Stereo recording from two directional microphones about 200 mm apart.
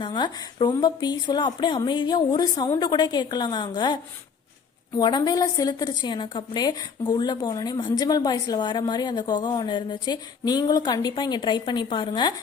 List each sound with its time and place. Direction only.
0.0 s a woman's voice: 25° left (ahead or behind)